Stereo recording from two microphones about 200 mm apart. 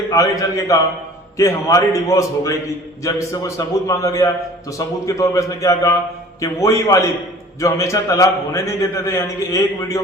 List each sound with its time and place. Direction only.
0.1 s a man's voice: 15° left (ahead or behind)